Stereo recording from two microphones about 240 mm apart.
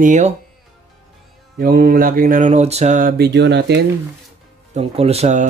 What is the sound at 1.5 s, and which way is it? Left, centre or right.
Music, right.